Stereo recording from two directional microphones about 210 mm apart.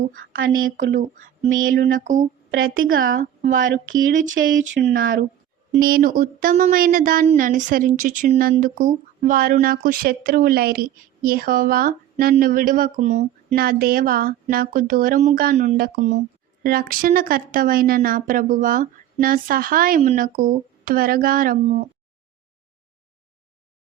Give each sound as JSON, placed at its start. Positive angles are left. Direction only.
{"t": 0.0, "sound": "speech", "side_deg": -40}
{"t": 0.3, "sound": "speech", "side_deg": -70}
{"t": 0.9, "sound": "speech", "side_deg": -40}
{"t": 1.5, "sound": "speech", "side_deg": -60}
{"t": 1.9, "sound": "a woman's voice", "side_deg": -35}
{"t": 3.5, "sound": "speech", "side_deg": -65}
{"t": 4.7, "sound": "a woman's voice", "side_deg": -50}